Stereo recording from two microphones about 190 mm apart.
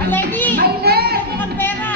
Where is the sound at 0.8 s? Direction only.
55° right (ahead or behind).